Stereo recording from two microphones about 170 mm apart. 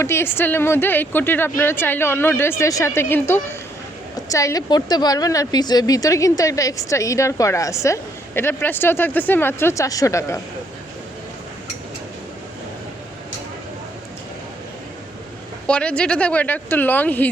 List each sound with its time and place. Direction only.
0.0 s a woman's voice: 15° left (ahead or behind)
15.6 s a woman's voice: 5° left (ahead or behind)